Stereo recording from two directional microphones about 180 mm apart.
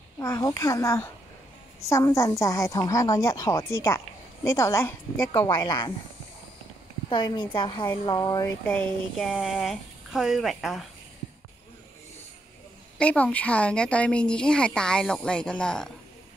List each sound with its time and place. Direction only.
0.2 s a woman's voice: 20° left (ahead or behind)
7.1 s a woman's voice: 25° left (ahead or behind)
8.7 s speech: 5° left (ahead or behind)
12.9 s speech: 5° left (ahead or behind)